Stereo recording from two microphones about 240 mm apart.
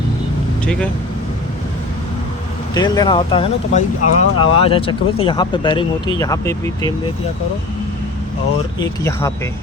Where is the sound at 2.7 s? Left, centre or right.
Centre.